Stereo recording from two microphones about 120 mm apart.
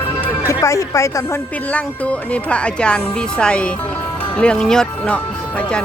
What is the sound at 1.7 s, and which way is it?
Speech, 10° left (ahead or behind).